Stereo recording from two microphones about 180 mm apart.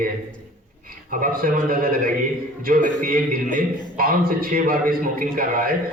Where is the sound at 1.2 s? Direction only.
50° right (ahead or behind).